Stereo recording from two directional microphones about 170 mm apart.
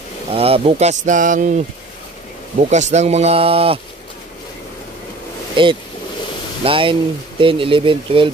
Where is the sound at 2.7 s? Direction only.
40° right (ahead or behind).